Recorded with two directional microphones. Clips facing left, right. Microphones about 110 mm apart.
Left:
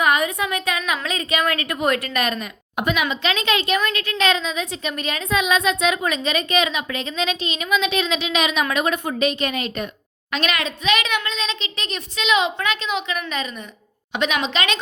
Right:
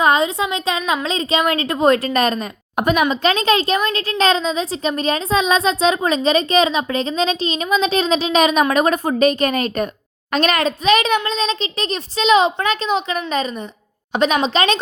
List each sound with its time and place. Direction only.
0.0 s a woman's voice: 30° right (ahead or behind)